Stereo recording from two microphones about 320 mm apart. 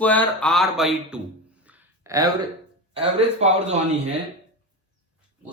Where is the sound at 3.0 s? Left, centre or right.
Right.